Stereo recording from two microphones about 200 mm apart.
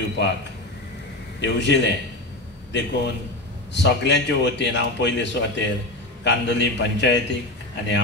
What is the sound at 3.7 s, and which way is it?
A man's voice, 60° left (ahead or behind).